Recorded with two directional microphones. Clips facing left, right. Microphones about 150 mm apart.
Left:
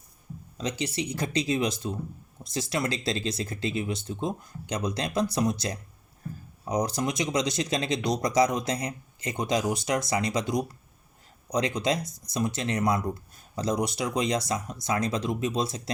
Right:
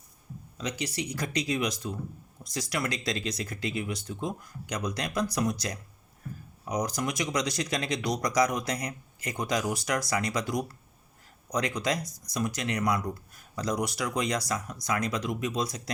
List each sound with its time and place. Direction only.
0.6 s speech: 25° left (ahead or behind)
6.3 s a sound: 30° left (ahead or behind)
6.7 s speech: 30° left (ahead or behind)